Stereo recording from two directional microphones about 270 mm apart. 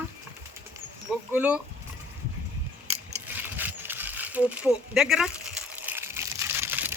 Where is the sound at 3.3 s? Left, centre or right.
Centre.